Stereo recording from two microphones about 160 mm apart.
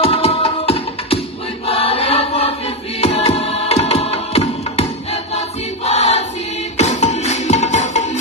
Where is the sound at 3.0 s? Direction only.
40° left (ahead or behind).